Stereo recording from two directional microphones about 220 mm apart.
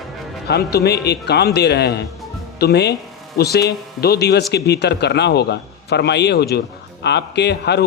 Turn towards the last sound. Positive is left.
turn(degrees=50)  # may be behind; listen again after turning